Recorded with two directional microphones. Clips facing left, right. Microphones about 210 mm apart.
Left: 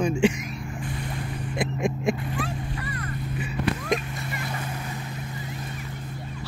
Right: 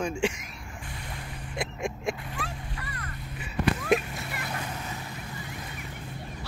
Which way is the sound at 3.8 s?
Centre (ahead or behind).